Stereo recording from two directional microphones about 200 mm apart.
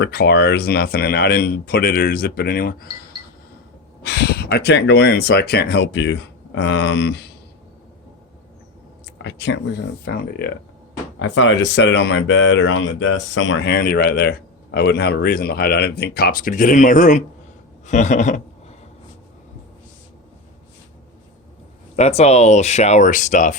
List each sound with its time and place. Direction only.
0.0 s speech: 55° left (ahead or behind)
4.0 s speech: 55° left (ahead or behind)
9.2 s speech: 60° left (ahead or behind)
11.2 s speech: 70° left (ahead or behind); by 18.4 s 35° left (ahead or behind)
21.9 s speech: 30° left (ahead or behind)